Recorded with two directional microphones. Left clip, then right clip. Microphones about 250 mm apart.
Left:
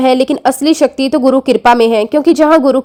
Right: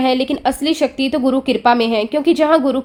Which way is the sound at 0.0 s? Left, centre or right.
Left.